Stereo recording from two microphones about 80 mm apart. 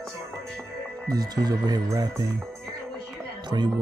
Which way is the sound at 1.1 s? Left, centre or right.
Right.